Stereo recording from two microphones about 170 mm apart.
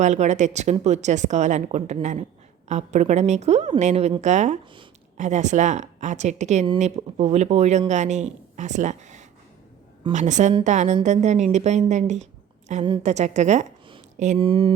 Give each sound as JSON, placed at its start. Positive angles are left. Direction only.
{"t": 0.0, "sound": "a woman's voice", "side_deg": -45}
{"t": 14.3, "sound": "speech", "side_deg": -30}